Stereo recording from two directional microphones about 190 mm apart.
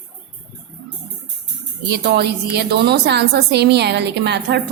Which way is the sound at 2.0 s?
55° right (ahead or behind).